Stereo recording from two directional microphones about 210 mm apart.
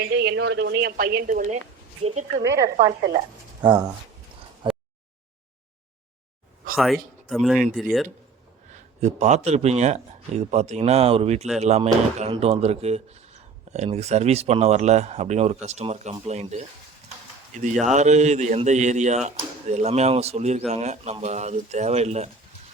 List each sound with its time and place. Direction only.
0.0 s speech: 55° right (ahead or behind); by 2.4 s 30° right (ahead or behind)
2.4 s speech: 15° right (ahead or behind)
6.7 s speech: centre (ahead or behind)
8.7 s speech: 35° right (ahead or behind)